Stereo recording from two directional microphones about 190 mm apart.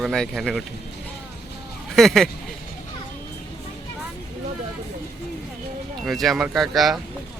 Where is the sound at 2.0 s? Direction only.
Centre (ahead or behind).